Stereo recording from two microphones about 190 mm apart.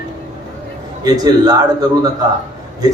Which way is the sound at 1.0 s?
20° right (ahead or behind).